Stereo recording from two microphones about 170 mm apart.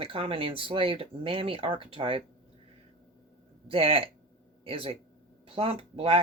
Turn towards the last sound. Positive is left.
turn(degrees=-35)  # may be behind; listen again after turning